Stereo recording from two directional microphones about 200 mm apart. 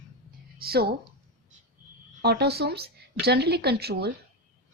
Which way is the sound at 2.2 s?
55° right (ahead or behind).